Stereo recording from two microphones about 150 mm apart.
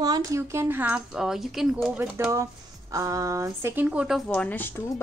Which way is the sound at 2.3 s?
20° right (ahead or behind).